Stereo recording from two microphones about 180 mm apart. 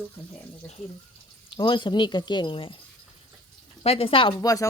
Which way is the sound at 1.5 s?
25° left (ahead or behind).